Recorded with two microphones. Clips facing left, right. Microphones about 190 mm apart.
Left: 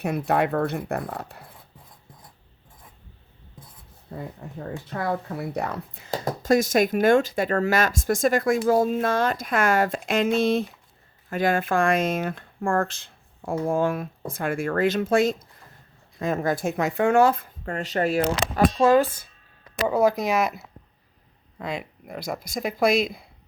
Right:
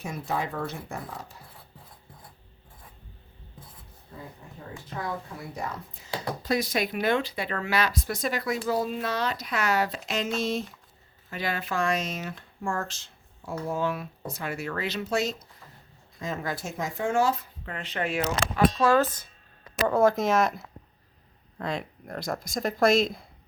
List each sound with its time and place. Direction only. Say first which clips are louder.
0.0 s speech: left 8 dB; 65° left (ahead or behind)
4.4 s speech: left 8 dB; 65° left (ahead or behind)
6.1 s speech: left 7 dB; 45° left (ahead or behind)
11.3 s speech: left 8 dB; 50° left (ahead or behind)
18.8 s speech: left 4 dB; 15° left (ahead or behind)